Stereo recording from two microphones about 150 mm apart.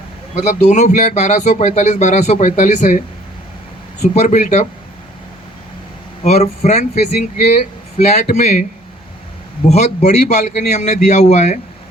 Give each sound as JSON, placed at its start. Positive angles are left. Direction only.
{"t": 0.3, "sound": "speech", "side_deg": 50}
{"t": 4.0, "sound": "speech", "side_deg": 50}
{"t": 6.2, "sound": "speech", "side_deg": 45}
{"t": 9.6, "sound": "speech", "side_deg": 50}